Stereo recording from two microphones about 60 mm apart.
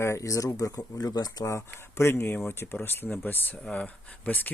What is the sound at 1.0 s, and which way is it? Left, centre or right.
Speech, left.